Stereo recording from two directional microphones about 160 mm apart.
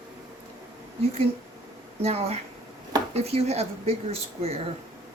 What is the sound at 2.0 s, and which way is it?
Speech, 40° right (ahead or behind).